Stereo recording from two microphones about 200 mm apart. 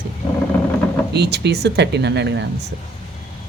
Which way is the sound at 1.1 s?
55° right (ahead or behind).